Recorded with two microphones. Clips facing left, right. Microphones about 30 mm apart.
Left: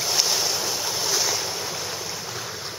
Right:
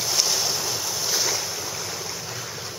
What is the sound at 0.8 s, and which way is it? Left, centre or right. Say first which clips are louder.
Waves: left 2 dB; left.